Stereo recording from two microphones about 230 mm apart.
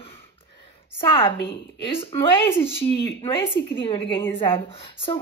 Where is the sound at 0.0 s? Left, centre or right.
Left.